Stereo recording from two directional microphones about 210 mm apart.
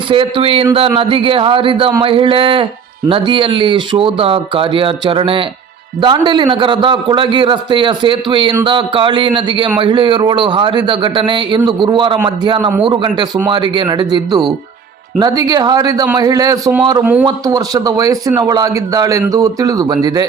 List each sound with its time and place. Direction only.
0.1 s speech: 25° right (ahead or behind)
17.0 s speech: 5° right (ahead or behind)
17.2 s speech: 15° right (ahead or behind)